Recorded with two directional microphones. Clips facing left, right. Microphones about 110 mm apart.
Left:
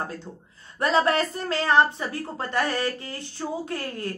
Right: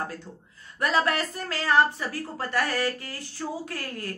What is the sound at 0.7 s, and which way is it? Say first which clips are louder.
A woman's voice: left 3 dB; 30° left (ahead or behind).